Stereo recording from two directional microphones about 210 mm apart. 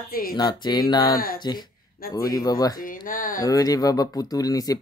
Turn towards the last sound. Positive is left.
turn(degrees=15)  # may be behind; listen again after turning